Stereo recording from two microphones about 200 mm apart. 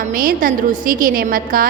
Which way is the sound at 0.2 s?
45° right (ahead or behind).